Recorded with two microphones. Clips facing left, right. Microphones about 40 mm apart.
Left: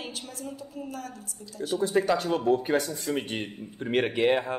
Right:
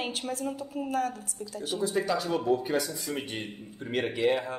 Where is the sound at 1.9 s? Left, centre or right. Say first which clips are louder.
Left 4 dB; left.